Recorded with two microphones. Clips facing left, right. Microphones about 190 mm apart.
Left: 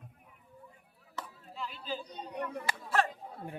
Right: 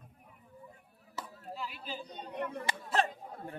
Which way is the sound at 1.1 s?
5° right (ahead or behind).